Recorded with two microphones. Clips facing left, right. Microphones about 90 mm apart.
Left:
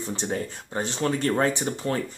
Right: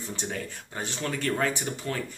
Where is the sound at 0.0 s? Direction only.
35° left (ahead or behind).